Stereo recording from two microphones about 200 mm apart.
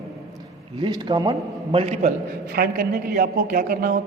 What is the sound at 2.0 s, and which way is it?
A man's voice, 50° right (ahead or behind).